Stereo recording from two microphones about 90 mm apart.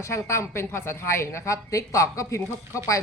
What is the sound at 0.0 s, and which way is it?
A woman's voice, 30° left (ahead or behind).